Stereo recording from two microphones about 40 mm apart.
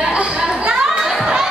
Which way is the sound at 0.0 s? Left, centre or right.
Right.